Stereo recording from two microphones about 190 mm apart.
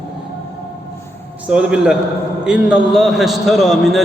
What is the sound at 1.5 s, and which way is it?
A man's voice, 5° right (ahead or behind).